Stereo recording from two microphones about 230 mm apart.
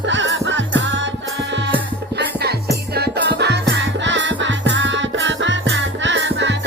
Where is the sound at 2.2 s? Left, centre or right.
Right.